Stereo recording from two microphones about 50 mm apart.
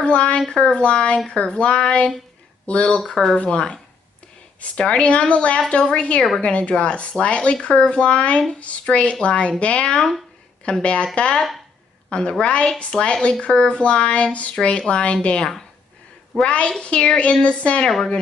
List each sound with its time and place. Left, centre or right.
0.0 s speech: left
3.0 s speech: centre
3.3 s speech: left